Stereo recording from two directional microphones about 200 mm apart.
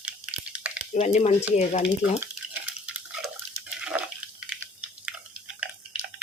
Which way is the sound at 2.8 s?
5° right (ahead or behind).